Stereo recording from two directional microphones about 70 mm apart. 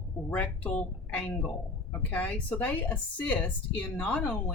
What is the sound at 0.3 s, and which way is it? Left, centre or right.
A woman's voice, left.